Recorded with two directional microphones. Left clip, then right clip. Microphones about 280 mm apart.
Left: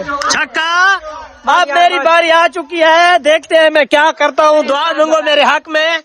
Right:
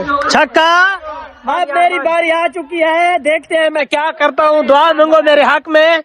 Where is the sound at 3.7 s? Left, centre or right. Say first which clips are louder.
Left 5 dB; left.